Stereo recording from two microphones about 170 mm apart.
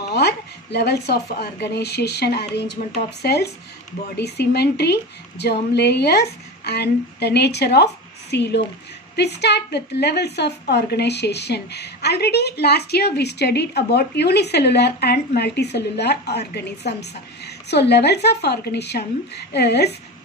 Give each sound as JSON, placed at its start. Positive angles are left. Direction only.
{"t": 0.1, "sound": "a woman's voice", "side_deg": 80}